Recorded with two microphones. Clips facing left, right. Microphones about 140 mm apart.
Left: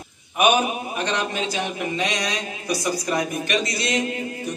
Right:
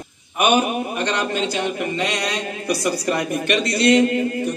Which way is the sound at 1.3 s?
60° right (ahead or behind).